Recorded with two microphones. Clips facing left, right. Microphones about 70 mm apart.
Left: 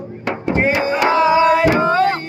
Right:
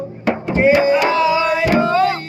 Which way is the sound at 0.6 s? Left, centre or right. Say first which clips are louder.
Right 5 dB; left.